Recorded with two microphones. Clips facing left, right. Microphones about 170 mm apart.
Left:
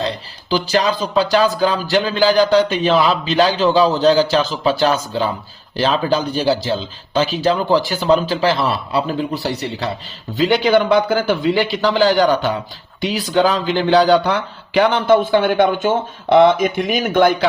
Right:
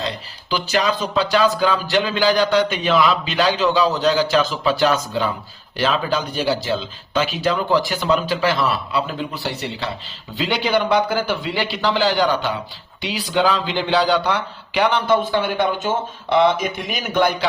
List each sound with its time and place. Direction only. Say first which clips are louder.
0.5 s a man's voice: left 3 dB; 35° left (ahead or behind); by 17.3 s 50° left (ahead or behind)